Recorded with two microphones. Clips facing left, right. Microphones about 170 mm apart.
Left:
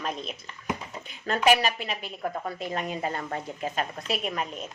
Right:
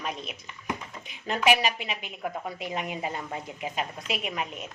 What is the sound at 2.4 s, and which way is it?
A woman's voice, 10° right (ahead or behind).